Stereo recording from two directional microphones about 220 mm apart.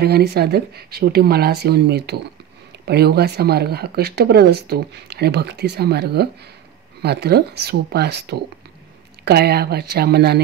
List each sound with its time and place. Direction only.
0.0 s speech: 45° right (ahead or behind)